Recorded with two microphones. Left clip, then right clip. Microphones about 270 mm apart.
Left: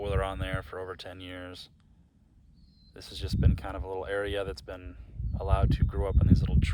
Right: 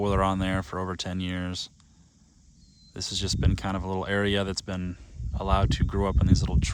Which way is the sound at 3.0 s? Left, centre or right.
Right.